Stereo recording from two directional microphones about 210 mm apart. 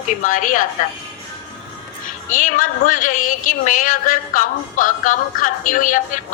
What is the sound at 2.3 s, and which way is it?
A woman's voice, 40° left (ahead or behind).